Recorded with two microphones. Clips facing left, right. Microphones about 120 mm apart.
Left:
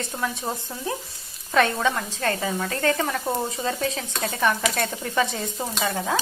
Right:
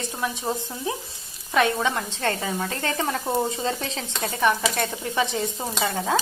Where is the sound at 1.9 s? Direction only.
30° right (ahead or behind).